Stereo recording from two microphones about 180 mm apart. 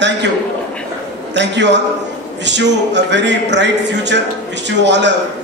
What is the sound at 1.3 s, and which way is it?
A man's voice, 75° right (ahead or behind).